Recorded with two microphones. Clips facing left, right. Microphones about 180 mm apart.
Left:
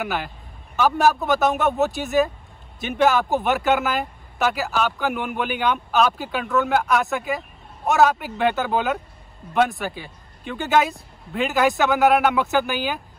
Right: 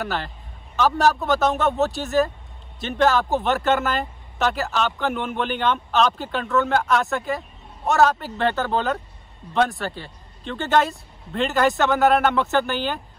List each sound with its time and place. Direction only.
0.0 s a man's voice: 15° left (ahead or behind)
1.0 s speech: centre (ahead or behind)
1.8 s speech: 20° left (ahead or behind)
3.4 s speech: centre (ahead or behind)
8.2 s speech: 15° left (ahead or behind)